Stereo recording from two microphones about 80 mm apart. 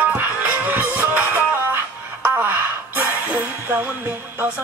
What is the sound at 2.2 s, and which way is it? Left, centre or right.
Gasp, right.